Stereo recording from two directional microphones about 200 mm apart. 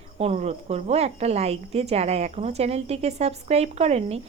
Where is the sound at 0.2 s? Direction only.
30° right (ahead or behind).